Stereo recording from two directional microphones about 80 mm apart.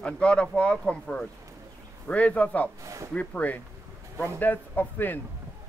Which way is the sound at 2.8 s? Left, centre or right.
Right.